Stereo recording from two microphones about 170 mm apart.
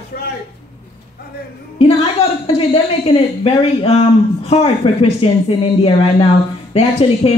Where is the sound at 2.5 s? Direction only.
35° left (ahead or behind).